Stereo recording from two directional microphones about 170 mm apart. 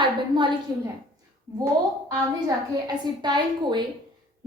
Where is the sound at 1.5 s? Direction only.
15° right (ahead or behind).